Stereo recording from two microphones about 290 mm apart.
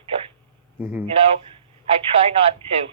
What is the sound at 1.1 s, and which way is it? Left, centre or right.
Speech, centre.